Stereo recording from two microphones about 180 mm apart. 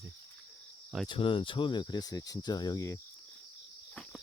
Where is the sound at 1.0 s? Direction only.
30° left (ahead or behind).